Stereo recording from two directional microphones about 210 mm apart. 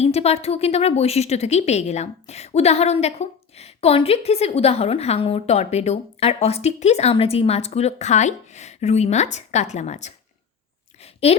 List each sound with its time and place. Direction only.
0.0 s a woman's voice: 30° left (ahead or behind)
11.3 s a woman's voice: 30° left (ahead or behind)